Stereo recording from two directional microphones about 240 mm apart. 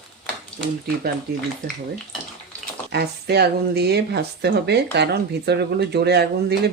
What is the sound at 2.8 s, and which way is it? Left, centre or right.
Speech, right.